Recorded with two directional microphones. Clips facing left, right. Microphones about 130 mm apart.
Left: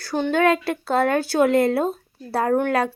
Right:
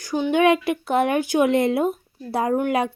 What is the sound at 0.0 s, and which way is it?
Speech, 15° right (ahead or behind).